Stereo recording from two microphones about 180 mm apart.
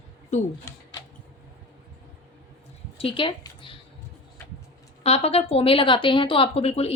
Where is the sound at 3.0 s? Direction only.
30° left (ahead or behind).